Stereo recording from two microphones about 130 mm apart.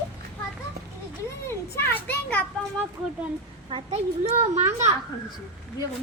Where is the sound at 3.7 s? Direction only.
40° right (ahead or behind).